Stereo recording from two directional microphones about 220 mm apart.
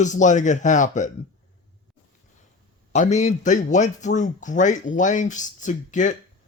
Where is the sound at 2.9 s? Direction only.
30° left (ahead or behind).